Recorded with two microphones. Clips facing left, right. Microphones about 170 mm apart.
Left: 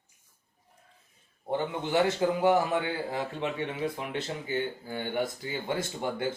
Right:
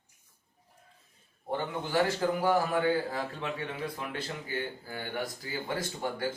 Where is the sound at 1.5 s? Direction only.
25° left (ahead or behind).